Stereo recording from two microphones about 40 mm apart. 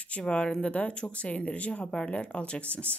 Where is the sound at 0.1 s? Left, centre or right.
Left.